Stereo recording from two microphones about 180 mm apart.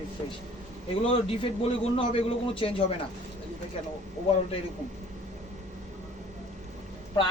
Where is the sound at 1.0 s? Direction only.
30° left (ahead or behind).